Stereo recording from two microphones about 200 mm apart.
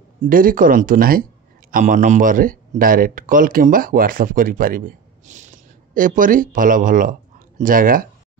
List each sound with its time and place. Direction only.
0.2 s speech: 45° right (ahead or behind)